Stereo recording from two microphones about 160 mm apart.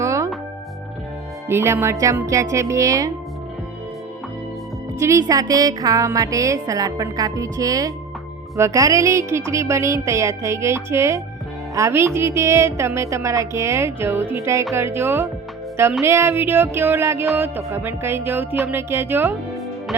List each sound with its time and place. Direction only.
0.0 s music: 20° right (ahead or behind)
1.5 s a woman's voice: 15° right (ahead or behind)
4.9 s a woman's voice: 20° right (ahead or behind)
8.5 s music: 20° right (ahead or behind)